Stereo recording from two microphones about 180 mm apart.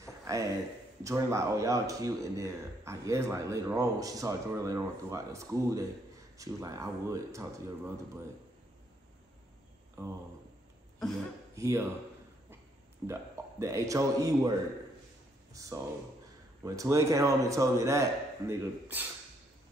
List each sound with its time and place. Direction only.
0.0 s a sound: 15° right (ahead or behind)
1.0 s speech: 15° right (ahead or behind)
11.5 s speech: 15° right (ahead or behind)
13.0 s a man's voice: 15° right (ahead or behind)
15.5 s speech: 20° right (ahead or behind)